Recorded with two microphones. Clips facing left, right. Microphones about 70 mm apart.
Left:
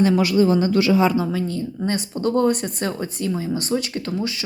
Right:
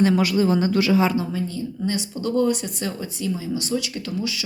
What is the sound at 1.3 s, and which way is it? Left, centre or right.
Speech, left.